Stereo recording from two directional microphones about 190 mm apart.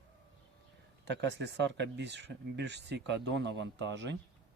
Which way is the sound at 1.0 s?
65° right (ahead or behind).